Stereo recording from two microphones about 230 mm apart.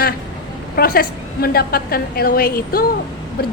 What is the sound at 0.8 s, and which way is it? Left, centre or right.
Speech, left.